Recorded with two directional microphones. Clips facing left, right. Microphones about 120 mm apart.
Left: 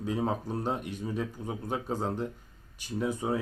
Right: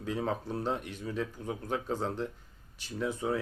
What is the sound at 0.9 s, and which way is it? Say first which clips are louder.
Speech: left 2 dB; 15° left (ahead or behind).